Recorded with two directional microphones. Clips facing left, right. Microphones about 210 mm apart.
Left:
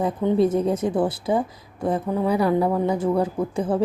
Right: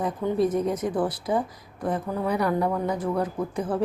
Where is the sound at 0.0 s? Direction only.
25° left (ahead or behind).